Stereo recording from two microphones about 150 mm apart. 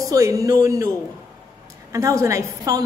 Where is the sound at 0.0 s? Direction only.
20° right (ahead or behind).